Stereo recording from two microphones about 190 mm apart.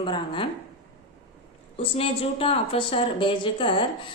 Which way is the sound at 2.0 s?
30° left (ahead or behind).